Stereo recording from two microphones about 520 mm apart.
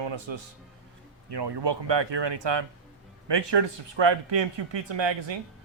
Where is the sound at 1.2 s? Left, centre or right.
Right.